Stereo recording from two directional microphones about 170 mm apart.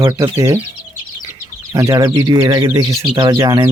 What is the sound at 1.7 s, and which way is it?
Speech, 20° right (ahead or behind).